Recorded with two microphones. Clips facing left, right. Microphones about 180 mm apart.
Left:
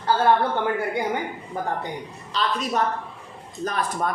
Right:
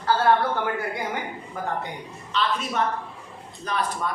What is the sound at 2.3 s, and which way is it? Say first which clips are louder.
A woman's voice: left 1 dB; 40° left (ahead or behind).